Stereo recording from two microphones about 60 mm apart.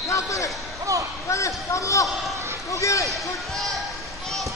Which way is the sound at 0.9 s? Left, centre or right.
Right.